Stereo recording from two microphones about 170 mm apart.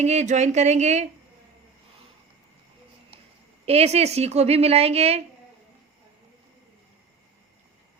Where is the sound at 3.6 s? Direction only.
35° right (ahead or behind).